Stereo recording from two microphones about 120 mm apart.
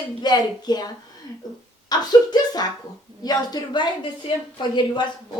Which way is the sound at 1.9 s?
35° left (ahead or behind).